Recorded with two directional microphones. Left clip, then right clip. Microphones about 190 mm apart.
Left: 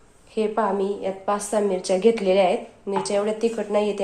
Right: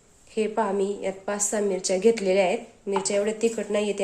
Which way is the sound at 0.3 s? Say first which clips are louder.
Left 3 dB; 30° right (ahead or behind).